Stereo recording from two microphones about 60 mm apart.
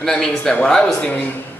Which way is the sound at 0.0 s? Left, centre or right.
Centre.